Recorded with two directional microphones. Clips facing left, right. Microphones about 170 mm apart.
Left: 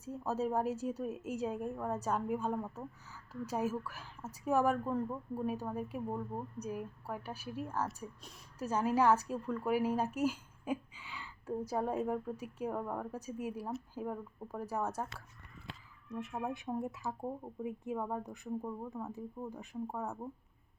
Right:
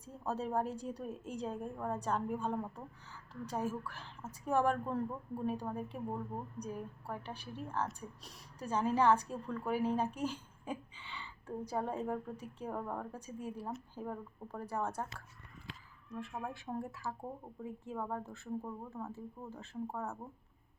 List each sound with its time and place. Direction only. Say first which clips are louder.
0.0 s a woman's voice: left 3 dB; 5° left (ahead or behind)
16.2 s a woman's voice: left 4 dB; 20° left (ahead or behind)
18.6 s a woman's voice: left 3 dB; 5° left (ahead or behind)